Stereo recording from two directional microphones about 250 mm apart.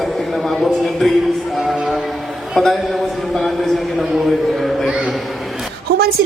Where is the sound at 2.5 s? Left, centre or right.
Centre.